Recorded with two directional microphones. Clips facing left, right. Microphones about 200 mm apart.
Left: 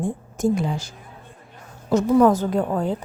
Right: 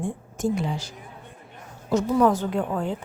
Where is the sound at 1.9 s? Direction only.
45° left (ahead or behind).